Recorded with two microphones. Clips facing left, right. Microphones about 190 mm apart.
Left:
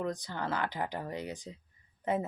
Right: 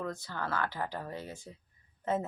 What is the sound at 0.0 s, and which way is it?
Speech, 15° left (ahead or behind).